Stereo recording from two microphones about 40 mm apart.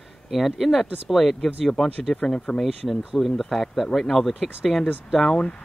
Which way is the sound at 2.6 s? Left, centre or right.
Centre.